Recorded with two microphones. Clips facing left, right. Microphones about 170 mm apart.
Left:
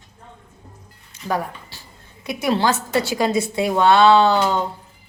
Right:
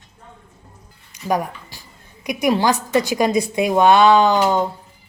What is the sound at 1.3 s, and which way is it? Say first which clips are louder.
A woman's voice: right 3 dB; 15° right (ahead or behind).